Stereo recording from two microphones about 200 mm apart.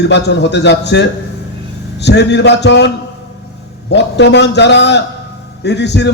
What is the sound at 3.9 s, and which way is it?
A man's voice, 60° left (ahead or behind).